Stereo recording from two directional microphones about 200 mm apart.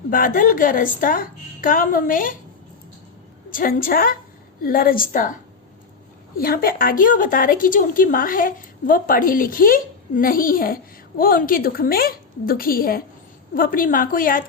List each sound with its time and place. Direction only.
0.1 s a woman's voice: 45° left (ahead or behind)
3.5 s a woman's voice: 45° left (ahead or behind)